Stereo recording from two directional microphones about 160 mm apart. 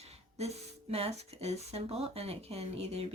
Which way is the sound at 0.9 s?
40° right (ahead or behind).